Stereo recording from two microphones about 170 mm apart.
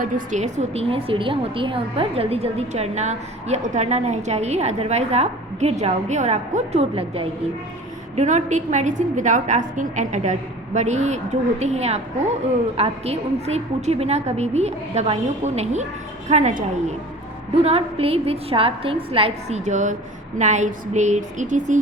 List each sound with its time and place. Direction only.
0.0 s a woman's voice: 45° right (ahead or behind)